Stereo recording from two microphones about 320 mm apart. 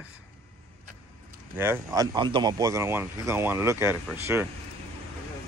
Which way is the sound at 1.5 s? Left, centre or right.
Centre.